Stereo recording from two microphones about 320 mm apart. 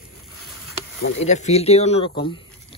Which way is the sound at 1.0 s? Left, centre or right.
Left.